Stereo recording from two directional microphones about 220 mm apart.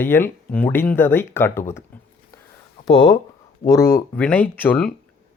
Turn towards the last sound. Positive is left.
turn(degrees=5)  # may be behind; listen again after turning